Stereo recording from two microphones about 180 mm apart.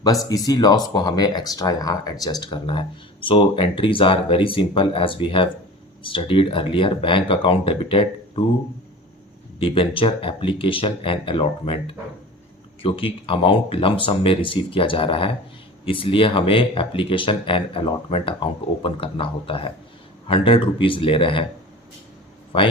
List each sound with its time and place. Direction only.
0.0 s speech: 20° left (ahead or behind)
9.6 s speech: 30° left (ahead or behind)
22.5 s speech: 30° left (ahead or behind)